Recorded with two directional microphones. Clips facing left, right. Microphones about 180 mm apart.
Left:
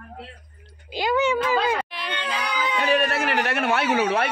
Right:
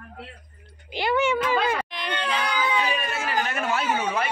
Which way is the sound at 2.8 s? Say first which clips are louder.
Left 5 dB; 70° left (ahead or behind).